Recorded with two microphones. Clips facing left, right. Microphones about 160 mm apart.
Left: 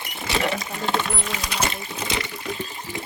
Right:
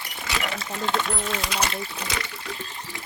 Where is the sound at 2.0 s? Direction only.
25° left (ahead or behind).